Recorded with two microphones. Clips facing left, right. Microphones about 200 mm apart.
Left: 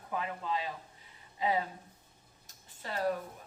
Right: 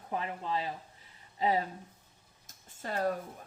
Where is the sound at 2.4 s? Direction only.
45° right (ahead or behind).